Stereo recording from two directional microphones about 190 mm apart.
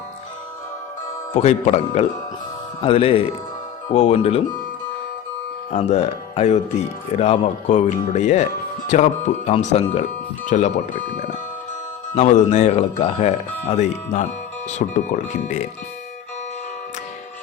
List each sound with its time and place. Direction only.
1.3 s a man's voice: 35° left (ahead or behind)
5.7 s speech: 35° left (ahead or behind)
9.5 s speech: 35° left (ahead or behind)